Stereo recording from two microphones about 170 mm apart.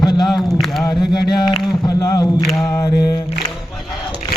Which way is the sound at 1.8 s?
20° left (ahead or behind).